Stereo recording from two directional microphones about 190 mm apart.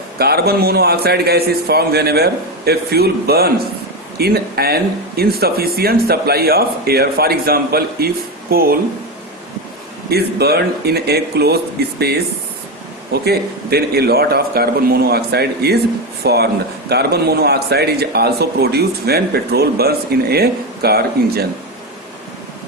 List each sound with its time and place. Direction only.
0.2 s speech: 55° right (ahead or behind)
10.1 s speech: 55° right (ahead or behind)
13.2 s speech: 55° right (ahead or behind)